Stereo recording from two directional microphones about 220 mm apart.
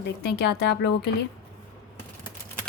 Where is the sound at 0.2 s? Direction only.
50° left (ahead or behind).